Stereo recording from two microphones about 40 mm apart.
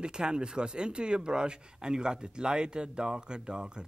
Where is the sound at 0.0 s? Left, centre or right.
Right.